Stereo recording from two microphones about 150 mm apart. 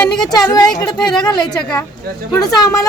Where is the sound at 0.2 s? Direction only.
25° left (ahead or behind).